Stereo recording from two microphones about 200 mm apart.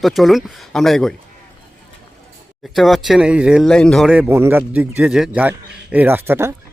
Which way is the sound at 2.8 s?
Centre (ahead or behind).